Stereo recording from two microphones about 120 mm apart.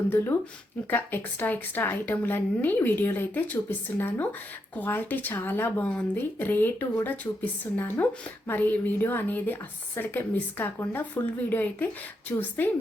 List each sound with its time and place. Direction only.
0.9 s a woman's voice: 15° left (ahead or behind)